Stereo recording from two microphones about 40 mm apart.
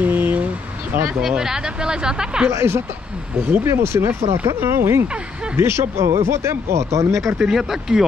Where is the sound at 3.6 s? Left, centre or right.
Right.